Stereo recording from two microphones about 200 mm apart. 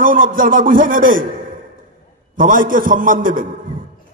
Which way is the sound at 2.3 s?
40° right (ahead or behind).